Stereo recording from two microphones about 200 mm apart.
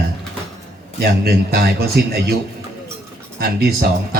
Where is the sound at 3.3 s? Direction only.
50° right (ahead or behind).